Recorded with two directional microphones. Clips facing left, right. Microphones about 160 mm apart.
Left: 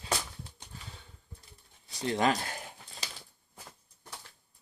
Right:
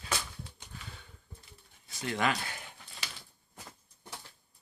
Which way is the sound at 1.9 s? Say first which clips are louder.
Left 4 dB; 30° left (ahead or behind).